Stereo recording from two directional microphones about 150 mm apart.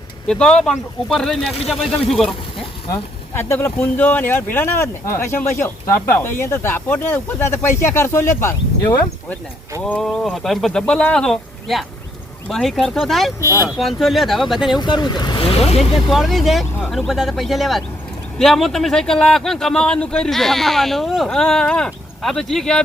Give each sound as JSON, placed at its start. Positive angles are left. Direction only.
{"t": 0.3, "sound": "speech", "side_deg": 5}
{"t": 2.9, "sound": "speech", "side_deg": 15}
{"t": 9.8, "sound": "speech", "side_deg": 5}
{"t": 13.4, "sound": "speech", "side_deg": 20}
{"t": 13.7, "sound": "speech", "side_deg": 0}
{"t": 14.8, "sound": "speech", "side_deg": 30}
{"t": 15.4, "sound": "speech", "side_deg": 45}
{"t": 16.0, "sound": "speech", "side_deg": 0}